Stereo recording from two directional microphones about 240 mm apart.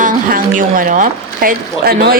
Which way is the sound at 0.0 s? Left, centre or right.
Right.